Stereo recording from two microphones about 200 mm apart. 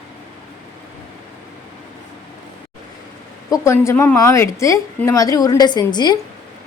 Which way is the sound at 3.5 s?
15° left (ahead or behind).